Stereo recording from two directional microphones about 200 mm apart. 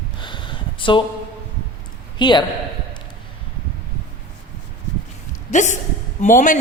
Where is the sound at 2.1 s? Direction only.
20° left (ahead or behind).